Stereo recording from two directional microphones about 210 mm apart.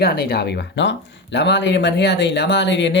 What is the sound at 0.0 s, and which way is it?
Speech, 45° left (ahead or behind).